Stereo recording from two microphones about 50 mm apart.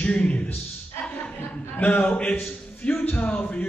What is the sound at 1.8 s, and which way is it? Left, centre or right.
A man's voice, left.